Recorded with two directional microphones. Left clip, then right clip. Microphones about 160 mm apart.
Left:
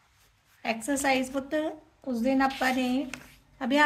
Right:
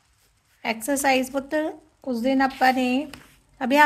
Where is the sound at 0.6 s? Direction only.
40° right (ahead or behind).